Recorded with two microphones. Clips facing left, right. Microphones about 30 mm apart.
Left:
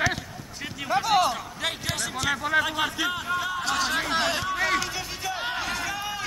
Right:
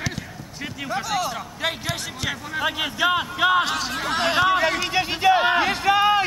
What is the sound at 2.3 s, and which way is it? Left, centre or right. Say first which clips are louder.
Speech: left 6 dB; left.